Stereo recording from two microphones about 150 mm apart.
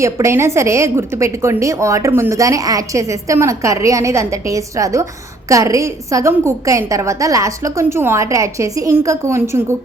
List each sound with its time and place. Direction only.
0.0 s a woman's voice: 20° right (ahead or behind)